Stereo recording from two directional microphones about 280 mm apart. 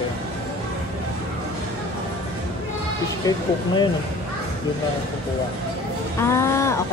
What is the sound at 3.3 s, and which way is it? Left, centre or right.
Speech, centre.